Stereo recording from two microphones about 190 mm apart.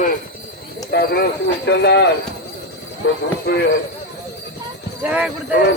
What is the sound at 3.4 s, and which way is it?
Speech, 60° left (ahead or behind).